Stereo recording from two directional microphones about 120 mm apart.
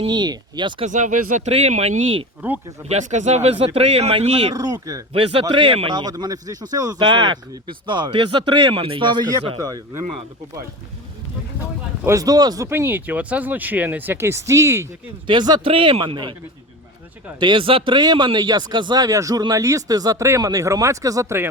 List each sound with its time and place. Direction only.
0.1 s a man's voice: 35° right (ahead or behind)
0.9 s speech: 90° right; by 2.2 s 65° right (ahead or behind)
2.4 s speech: 15° right (ahead or behind)
2.8 s speech: 75° right (ahead or behind); by 4.5 s 50° right (ahead or behind)
4.5 s a man's voice: 30° right (ahead or behind)
5.1 s a man's voice: 45° right (ahead or behind)
12.0 s a man's voice: 30° right (ahead or behind)
12.6 s speech: 20° right (ahead or behind)
15.3 s a man's voice: 40° right (ahead or behind)
17.4 s a man's voice: 45° right (ahead or behind); by 21.4 s 25° right (ahead or behind)